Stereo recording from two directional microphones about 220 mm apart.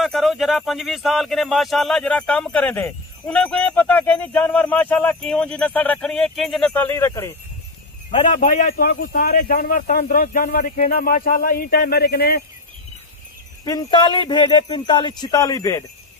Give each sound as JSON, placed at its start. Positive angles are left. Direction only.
{"t": 0.0, "sound": "speech", "side_deg": 0}
{"t": 8.1, "sound": "speech", "side_deg": 35}
{"t": 13.7, "sound": "speech", "side_deg": 20}